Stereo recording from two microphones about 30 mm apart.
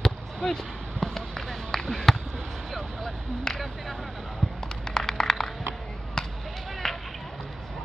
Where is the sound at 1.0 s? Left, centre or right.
Centre.